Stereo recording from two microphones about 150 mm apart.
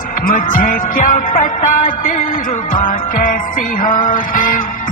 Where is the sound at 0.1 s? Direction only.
70° left (ahead or behind).